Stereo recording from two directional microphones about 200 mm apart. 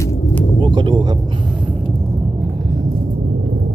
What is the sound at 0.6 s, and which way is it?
Speech, 25° right (ahead or behind).